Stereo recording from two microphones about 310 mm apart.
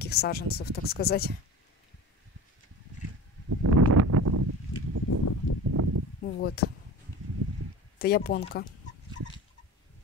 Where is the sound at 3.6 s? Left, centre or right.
Right.